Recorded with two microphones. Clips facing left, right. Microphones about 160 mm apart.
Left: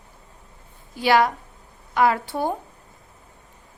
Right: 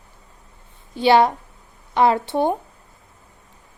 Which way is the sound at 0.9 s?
25° right (ahead or behind).